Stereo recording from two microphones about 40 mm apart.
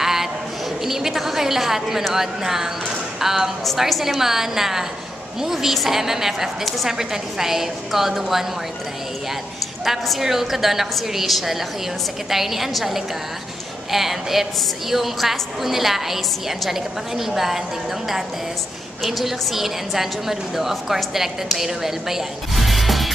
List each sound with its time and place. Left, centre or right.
0.0 s a sound: centre
0.8 s a woman's voice: centre
10.2 s a woman's voice: centre
19.0 s a woman's voice: centre